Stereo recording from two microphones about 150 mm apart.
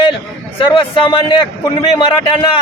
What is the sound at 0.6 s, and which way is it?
A man's voice, 35° left (ahead or behind).